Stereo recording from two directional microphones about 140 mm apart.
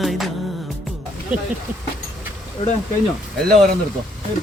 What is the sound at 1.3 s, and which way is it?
Vehicle, 5° right (ahead or behind).